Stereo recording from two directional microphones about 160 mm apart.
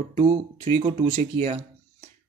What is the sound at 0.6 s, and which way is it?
Speech, 40° right (ahead or behind).